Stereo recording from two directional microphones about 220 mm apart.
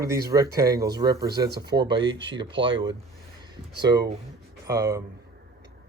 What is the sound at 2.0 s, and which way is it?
Speech, 55° right (ahead or behind).